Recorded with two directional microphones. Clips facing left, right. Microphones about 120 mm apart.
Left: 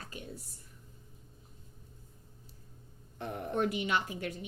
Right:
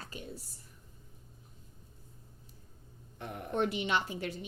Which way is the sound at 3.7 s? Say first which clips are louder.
Even; 30° right (ahead or behind).